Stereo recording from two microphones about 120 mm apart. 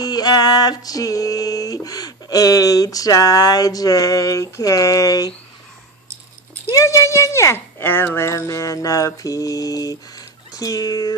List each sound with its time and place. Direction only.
0.0 s music: 35° left (ahead or behind)
6.7 s speech: 25° left (ahead or behind)